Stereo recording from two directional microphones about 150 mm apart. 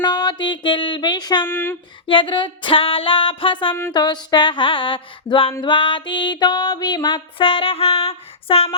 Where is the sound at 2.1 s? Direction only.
35° left (ahead or behind).